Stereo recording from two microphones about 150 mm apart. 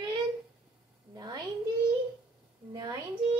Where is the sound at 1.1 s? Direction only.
30° right (ahead or behind).